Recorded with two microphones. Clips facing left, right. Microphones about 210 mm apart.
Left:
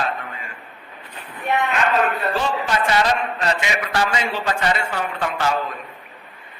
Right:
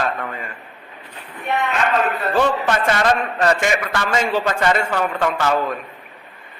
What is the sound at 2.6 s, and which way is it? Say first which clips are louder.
A man's voice: right 2 dB; 50° right (ahead or behind).